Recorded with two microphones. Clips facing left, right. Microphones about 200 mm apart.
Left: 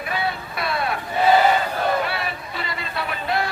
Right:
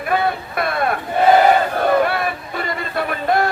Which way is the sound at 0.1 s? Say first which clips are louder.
Right 8 dB; 50° right (ahead or behind).